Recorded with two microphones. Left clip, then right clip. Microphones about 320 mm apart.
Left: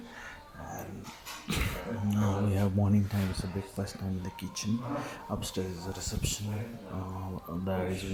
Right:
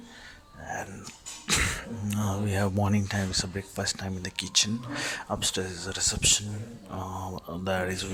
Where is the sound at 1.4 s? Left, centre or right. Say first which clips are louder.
Right 8 dB; right.